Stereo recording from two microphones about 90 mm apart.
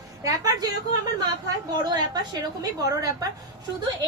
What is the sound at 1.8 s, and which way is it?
A woman's voice, 50° right (ahead or behind).